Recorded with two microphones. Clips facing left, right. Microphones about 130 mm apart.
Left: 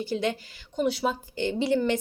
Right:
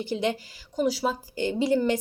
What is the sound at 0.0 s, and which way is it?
Speech, 15° right (ahead or behind).